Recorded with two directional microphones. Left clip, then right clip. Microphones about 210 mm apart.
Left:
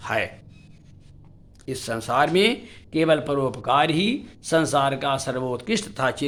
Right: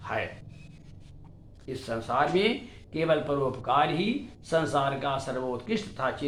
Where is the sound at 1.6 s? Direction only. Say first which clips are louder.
Left 5 dB; 60° left (ahead or behind).